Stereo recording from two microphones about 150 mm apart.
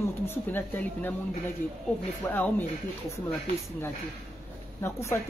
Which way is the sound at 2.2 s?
10° left (ahead or behind).